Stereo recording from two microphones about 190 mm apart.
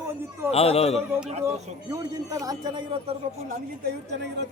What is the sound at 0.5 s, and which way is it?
Speech, 30° left (ahead or behind).